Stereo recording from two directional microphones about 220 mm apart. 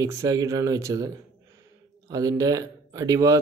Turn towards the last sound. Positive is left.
turn(degrees=-15)  # may be behind; listen again after turning